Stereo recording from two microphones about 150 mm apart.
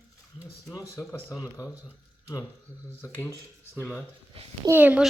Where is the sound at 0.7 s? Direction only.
15° left (ahead or behind).